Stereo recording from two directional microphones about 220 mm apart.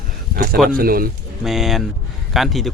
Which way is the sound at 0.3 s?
40° right (ahead or behind).